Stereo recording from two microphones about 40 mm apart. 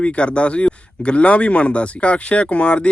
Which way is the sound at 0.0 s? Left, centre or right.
Left.